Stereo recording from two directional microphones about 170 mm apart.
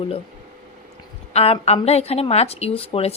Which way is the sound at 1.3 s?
35° left (ahead or behind).